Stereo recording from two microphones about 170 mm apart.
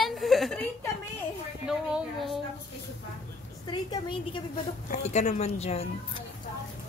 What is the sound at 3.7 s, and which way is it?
Speech, 30° left (ahead or behind).